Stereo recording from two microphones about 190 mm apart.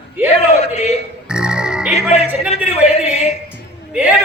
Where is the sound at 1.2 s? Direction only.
5° right (ahead or behind).